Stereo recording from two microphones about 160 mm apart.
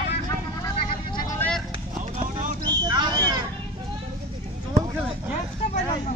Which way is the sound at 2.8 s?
25° right (ahead or behind).